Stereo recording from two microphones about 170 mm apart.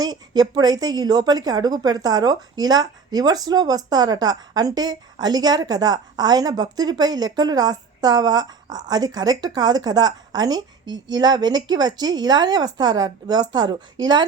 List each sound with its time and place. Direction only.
0.0 s speech: 25° right (ahead or behind)